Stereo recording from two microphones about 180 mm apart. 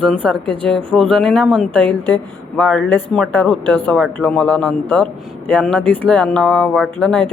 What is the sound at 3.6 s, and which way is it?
Speech, 25° right (ahead or behind).